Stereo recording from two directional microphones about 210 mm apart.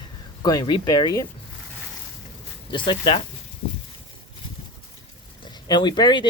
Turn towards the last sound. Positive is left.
turn(degrees=20)  # may be behind; listen again after turning